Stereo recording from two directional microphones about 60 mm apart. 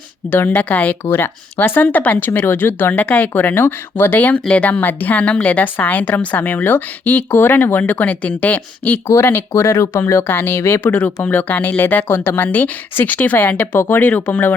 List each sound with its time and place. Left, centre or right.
0.3 s speech: left
1.1 s speech: left
7.3 s speech: left
9.0 s speech: left
10.2 s speech: left
10.9 s speech: left
13.7 s speech: left
14.0 s speech: left